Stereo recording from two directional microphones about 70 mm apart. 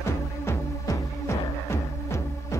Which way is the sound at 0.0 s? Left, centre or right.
Left.